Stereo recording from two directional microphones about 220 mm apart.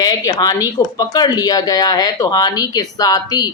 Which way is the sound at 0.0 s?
15° left (ahead or behind).